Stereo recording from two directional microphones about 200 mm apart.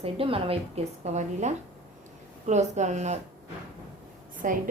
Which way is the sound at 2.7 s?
35° right (ahead or behind).